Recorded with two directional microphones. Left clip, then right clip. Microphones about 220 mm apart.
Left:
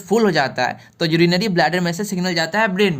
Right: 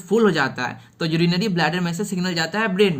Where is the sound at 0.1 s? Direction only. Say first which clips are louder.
Left 2 dB; 30° left (ahead or behind).